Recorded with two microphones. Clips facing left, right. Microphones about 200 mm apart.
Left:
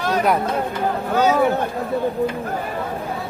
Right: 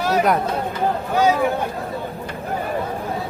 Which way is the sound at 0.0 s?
10° right (ahead or behind).